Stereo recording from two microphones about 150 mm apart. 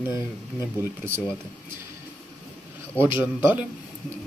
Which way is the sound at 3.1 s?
15° right (ahead or behind).